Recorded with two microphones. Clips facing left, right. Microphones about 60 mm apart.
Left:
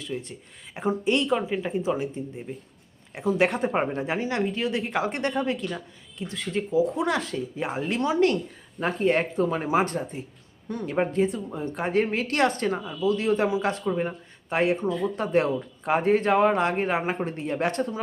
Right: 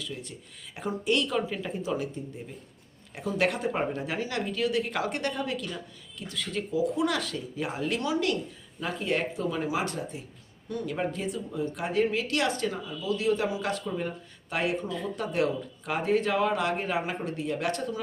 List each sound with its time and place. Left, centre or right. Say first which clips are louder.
0.0 s speech: left 5 dB; left